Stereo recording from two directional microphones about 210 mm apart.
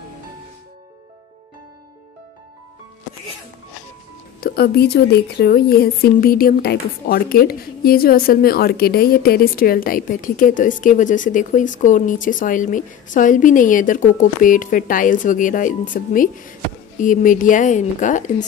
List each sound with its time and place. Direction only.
4.4 s a woman's voice: 45° left (ahead or behind)